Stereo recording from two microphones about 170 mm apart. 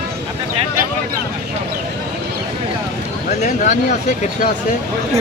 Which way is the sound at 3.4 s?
45° left (ahead or behind).